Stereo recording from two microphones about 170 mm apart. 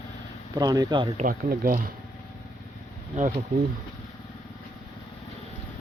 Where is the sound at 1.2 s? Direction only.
55° right (ahead or behind).